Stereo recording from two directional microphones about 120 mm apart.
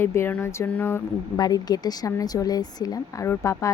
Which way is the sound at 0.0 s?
20° left (ahead or behind).